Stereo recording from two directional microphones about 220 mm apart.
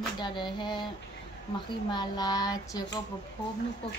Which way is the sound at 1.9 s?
20° left (ahead or behind).